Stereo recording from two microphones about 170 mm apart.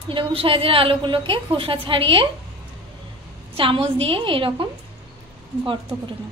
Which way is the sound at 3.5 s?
30° right (ahead or behind).